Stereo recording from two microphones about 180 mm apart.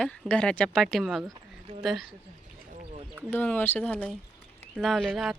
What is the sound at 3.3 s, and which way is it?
Speech, 10° left (ahead or behind).